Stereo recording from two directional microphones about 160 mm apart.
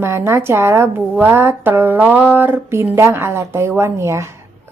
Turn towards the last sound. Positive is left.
turn(degrees=-15)  # may be behind; listen again after turning